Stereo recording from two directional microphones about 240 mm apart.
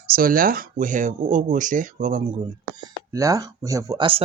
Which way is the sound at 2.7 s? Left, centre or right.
Centre.